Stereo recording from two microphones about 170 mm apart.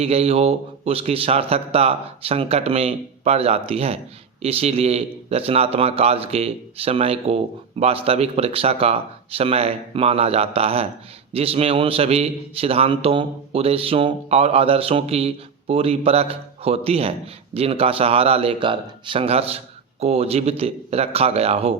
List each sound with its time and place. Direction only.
0.0 s a man's voice: 35° right (ahead or behind)